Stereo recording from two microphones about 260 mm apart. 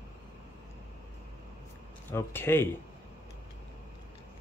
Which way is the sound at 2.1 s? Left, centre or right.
Centre.